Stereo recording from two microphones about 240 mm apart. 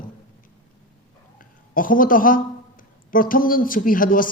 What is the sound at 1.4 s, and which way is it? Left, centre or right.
Speech, left.